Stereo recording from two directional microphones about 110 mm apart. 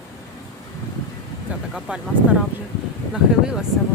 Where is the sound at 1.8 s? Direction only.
10° right (ahead or behind).